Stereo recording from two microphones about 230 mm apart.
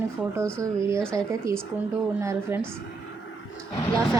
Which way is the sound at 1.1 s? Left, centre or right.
Centre.